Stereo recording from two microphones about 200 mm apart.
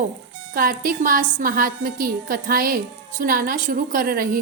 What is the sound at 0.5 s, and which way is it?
A woman's voice, 45° right (ahead or behind).